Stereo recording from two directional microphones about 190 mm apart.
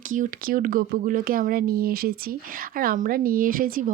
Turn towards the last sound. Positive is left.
turn(degrees=-45)  # may be behind; listen again after turning